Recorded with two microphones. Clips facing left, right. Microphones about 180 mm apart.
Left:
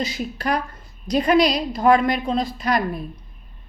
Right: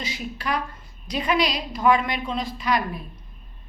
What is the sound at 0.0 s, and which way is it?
A woman's voice, 40° left (ahead or behind).